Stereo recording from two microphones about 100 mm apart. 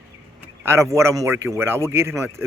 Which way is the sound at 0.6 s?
25° right (ahead or behind).